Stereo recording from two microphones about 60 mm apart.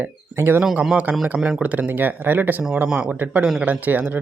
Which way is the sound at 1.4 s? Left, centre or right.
Centre.